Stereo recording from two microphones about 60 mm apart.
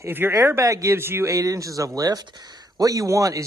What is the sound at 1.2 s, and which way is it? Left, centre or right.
Speech, right.